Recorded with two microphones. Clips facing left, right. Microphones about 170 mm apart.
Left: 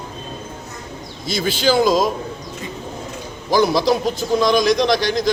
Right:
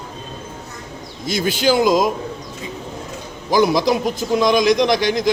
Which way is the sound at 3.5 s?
15° right (ahead or behind).